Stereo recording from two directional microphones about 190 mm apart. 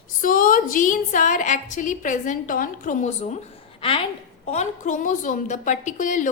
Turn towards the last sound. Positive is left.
turn(degrees=40)  # may be behind; listen again after turning